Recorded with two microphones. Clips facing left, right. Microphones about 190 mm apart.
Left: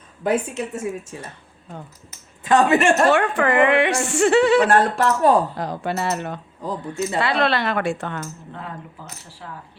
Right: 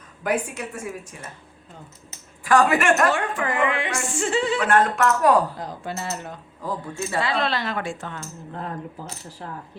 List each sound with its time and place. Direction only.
0.2 s a woman's voice: 25° left (ahead or behind)
2.4 s a woman's voice: 20° left (ahead or behind)
3.1 s a woman's voice: 70° left (ahead or behind)
4.7 s a woman's voice: 30° left (ahead or behind)
5.5 s a woman's voice: 75° left (ahead or behind)
6.6 s speech: 20° left (ahead or behind)
7.2 s speech: 65° left (ahead or behind)